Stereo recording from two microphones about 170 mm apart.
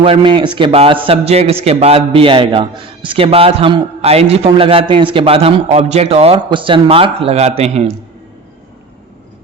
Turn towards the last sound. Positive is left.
turn(degrees=-40)  # may be behind; listen again after turning